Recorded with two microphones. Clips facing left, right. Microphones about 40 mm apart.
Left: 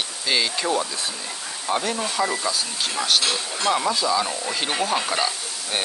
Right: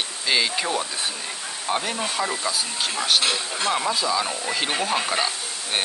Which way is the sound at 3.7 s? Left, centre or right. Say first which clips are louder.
Left 3 dB; centre.